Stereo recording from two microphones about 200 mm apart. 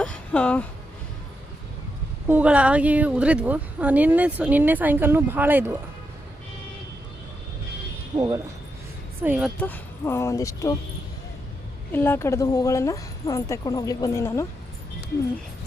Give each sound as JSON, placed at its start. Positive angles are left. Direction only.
{"t": 0.0, "sound": "a sound", "side_deg": 5}
{"t": 2.2, "sound": "speech", "side_deg": -10}
{"t": 8.1, "sound": "speech", "side_deg": -20}
{"t": 9.2, "sound": "speech", "side_deg": -5}
{"t": 9.6, "sound": "speech", "side_deg": 10}
{"t": 11.9, "sound": "speech", "side_deg": 10}